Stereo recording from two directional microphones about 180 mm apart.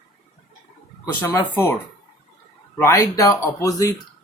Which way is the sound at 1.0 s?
10° left (ahead or behind).